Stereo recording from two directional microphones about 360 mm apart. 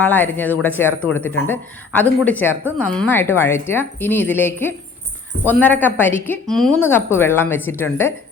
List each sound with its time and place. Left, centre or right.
0.0 s a woman's voice: centre